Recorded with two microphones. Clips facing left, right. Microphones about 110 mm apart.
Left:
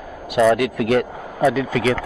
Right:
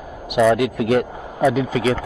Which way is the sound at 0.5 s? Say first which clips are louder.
Even; 20° right (ahead or behind).